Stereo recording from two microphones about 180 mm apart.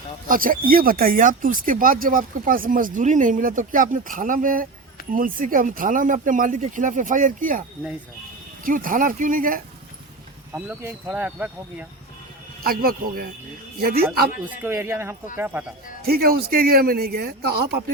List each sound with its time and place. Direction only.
0.3 s speech: 50° right (ahead or behind)
8.6 s speech: 50° right (ahead or behind)
10.5 s speech: 10° right (ahead or behind)
12.6 s speech: 55° right (ahead or behind)
14.6 s speech: 15° right (ahead or behind)
16.0 s speech: 60° right (ahead or behind)